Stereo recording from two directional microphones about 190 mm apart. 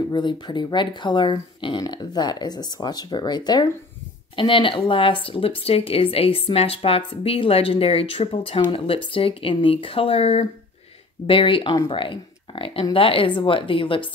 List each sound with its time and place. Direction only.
0.1 s speech: 25° left (ahead or behind)